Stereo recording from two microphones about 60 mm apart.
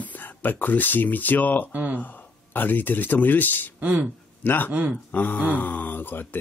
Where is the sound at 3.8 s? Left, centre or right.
Right.